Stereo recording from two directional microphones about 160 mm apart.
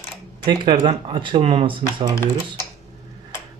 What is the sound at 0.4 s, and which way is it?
Speech, 30° right (ahead or behind).